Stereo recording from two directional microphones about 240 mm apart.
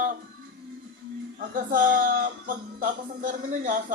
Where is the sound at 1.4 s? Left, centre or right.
Right.